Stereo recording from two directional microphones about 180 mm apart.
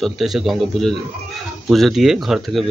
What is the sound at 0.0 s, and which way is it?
Speech, centre (ahead or behind).